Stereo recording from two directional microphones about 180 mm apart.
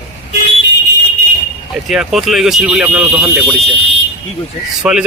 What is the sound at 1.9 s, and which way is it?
Speech, centre (ahead or behind).